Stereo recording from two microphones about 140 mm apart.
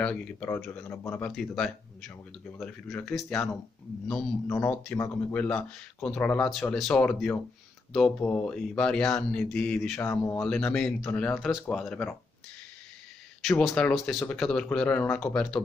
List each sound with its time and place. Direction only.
0.0 s speech: 10° left (ahead or behind)
1.3 s speech: 5° left (ahead or behind)
9.9 s speech: 20° left (ahead or behind)
10.4 s speech: 5° left (ahead or behind)
13.5 s speech: 5° left (ahead or behind)